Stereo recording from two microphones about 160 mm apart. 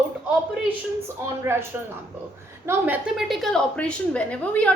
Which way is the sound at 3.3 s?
Centre (ahead or behind).